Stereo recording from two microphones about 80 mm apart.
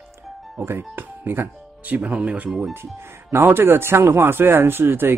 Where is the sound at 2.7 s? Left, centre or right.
Right.